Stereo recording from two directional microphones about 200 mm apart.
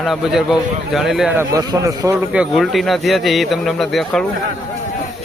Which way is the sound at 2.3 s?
5° right (ahead or behind).